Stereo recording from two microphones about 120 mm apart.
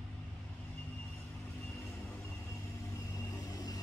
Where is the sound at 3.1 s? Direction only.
30° left (ahead or behind).